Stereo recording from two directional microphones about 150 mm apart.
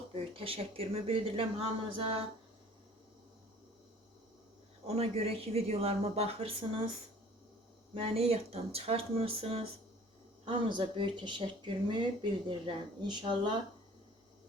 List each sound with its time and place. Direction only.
0.1 s speech: 40° right (ahead or behind)
4.9 s speech: 40° right (ahead or behind)
7.9 s speech: 40° right (ahead or behind)